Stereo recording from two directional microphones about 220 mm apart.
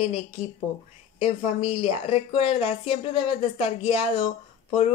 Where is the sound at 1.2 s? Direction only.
25° left (ahead or behind).